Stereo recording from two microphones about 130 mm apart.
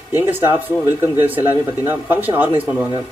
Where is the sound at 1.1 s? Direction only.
15° right (ahead or behind).